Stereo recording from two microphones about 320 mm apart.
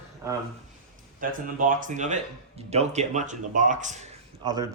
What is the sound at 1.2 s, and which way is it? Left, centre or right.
Speech, right.